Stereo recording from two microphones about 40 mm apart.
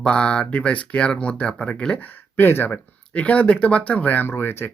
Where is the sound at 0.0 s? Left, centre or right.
Left.